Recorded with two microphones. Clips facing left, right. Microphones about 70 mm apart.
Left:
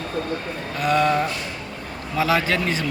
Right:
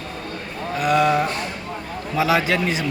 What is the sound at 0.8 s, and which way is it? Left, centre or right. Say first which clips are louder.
Livestock: right 1 dB; centre.